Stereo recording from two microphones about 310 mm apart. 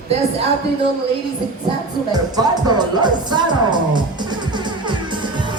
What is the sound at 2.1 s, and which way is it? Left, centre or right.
Music, centre.